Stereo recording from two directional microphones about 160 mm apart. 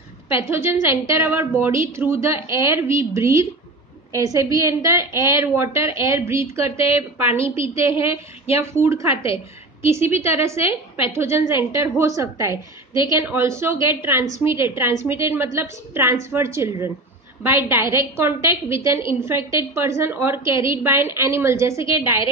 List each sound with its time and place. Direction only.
0.3 s a woman's voice: 15° right (ahead or behind)
9.1 s a woman's voice: 35° left (ahead or behind)
9.8 s a woman's voice: 15° right (ahead or behind)